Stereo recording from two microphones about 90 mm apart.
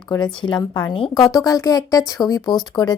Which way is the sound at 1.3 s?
40° left (ahead or behind).